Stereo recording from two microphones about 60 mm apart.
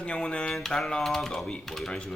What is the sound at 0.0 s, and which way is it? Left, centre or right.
Speech, centre.